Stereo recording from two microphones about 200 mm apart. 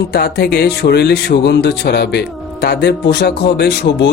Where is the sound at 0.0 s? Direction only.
55° left (ahead or behind).